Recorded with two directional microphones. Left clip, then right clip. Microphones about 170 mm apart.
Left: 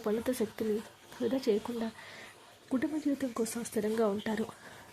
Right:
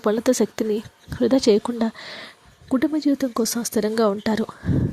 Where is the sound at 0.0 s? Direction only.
45° right (ahead or behind).